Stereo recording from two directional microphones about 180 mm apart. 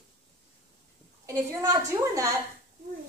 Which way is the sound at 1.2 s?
15° right (ahead or behind).